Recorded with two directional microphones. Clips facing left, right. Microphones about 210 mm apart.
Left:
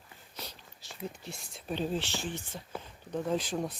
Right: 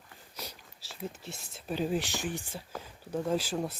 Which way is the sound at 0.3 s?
5° right (ahead or behind).